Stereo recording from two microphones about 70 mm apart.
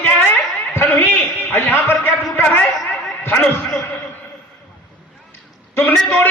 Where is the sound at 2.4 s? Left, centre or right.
Left.